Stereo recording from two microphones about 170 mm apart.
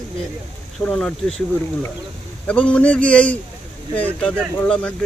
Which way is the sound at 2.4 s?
5° left (ahead or behind).